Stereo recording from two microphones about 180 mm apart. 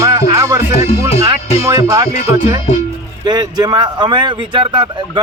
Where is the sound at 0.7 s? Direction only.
35° left (ahead or behind).